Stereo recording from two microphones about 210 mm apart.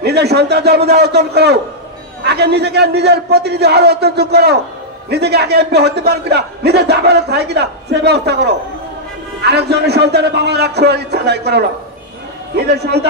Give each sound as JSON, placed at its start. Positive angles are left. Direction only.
{"t": 0.0, "sound": "a man's voice", "side_deg": -50}